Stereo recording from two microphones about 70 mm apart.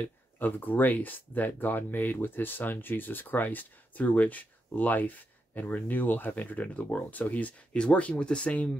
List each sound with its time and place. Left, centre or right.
0.4 s speech: left